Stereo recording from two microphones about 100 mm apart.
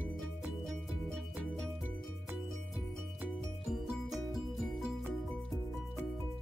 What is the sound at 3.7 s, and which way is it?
Music, centre (ahead or behind).